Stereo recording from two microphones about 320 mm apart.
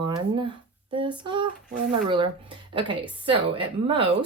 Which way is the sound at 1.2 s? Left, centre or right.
Centre.